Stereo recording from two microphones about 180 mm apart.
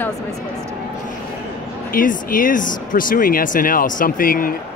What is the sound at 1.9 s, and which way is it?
Speech, 50° left (ahead or behind).